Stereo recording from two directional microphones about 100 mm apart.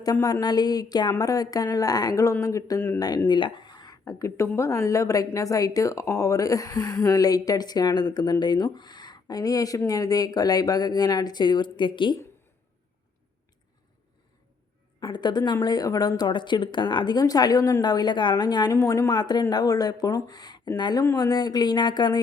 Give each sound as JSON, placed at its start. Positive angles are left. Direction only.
{"t": 0.0, "sound": "a woman's voice", "side_deg": 35}
{"t": 3.2, "sound": "a sound", "side_deg": 50}
{"t": 4.0, "sound": "a woman's voice", "side_deg": 30}
{"t": 15.0, "sound": "speech", "side_deg": 45}
{"t": 18.7, "sound": "a woman's voice", "side_deg": 35}